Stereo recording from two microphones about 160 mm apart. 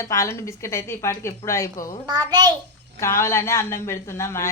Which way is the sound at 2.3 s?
25° right (ahead or behind).